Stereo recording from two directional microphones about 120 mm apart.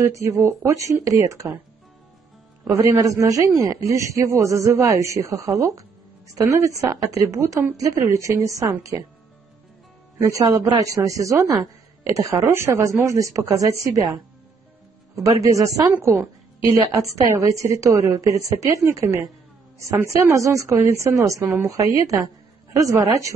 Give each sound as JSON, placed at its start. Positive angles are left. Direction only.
{"t": 0.0, "sound": "a woman's voice", "side_deg": -25}
{"t": 2.6, "sound": "a woman's voice", "side_deg": -30}
{"t": 10.1, "sound": "a woman's voice", "side_deg": -30}
{"t": 15.4, "sound": "a woman's voice", "side_deg": -25}